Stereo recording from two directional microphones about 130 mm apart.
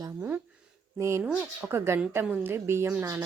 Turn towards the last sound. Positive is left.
turn(degrees=-15)  # may be behind; listen again after turning